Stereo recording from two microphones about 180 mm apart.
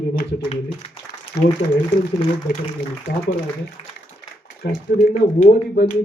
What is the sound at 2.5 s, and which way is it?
Speech, 65° left (ahead or behind).